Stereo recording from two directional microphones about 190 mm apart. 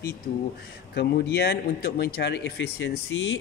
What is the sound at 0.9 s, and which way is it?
Speech, 60° left (ahead or behind).